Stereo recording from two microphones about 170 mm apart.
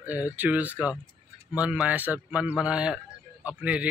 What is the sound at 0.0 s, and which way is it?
Speech, 10° right (ahead or behind).